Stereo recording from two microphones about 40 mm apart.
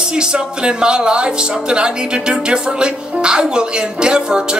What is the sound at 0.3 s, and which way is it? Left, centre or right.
Speech, right.